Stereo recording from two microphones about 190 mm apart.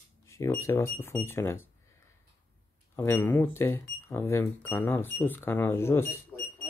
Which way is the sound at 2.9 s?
10° left (ahead or behind).